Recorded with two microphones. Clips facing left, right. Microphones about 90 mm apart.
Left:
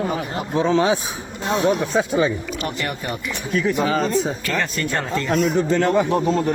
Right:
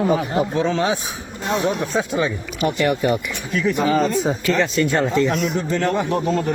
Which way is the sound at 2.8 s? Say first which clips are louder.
Right 8 dB; centre (ahead or behind).